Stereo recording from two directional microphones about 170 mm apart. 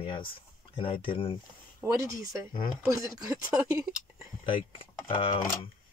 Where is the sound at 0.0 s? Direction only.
30° left (ahead or behind).